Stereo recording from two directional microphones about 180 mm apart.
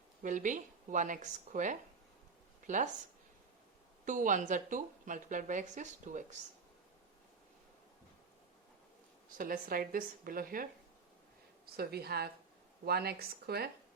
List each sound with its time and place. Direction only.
0.2 s a woman's voice: 45° right (ahead or behind)
4.0 s a woman's voice: 45° right (ahead or behind)
9.4 s a woman's voice: 50° right (ahead or behind)